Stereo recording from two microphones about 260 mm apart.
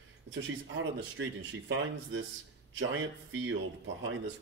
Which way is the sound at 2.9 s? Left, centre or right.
Right.